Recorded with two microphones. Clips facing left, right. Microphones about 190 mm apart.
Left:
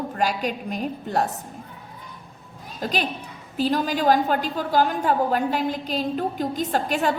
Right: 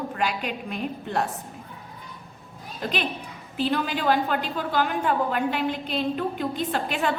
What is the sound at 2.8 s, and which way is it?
A woman's voice, 40° left (ahead or behind).